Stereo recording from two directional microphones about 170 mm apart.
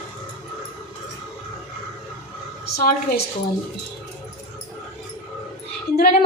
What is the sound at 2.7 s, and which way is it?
Speech, 65° left (ahead or behind).